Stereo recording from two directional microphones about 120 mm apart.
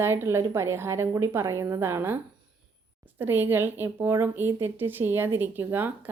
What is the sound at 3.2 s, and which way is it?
A woman's voice, 15° right (ahead or behind).